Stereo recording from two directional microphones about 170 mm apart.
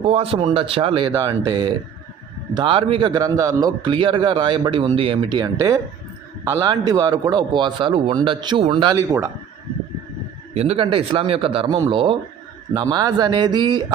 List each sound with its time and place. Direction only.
0.1 s speech: 35° right (ahead or behind)
3.1 s speech: 20° right (ahead or behind)
9.0 s speech: 15° right (ahead or behind)
10.5 s speech: 35° right (ahead or behind)